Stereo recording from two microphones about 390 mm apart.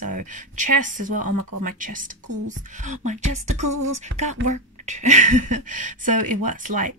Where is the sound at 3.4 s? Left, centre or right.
Right.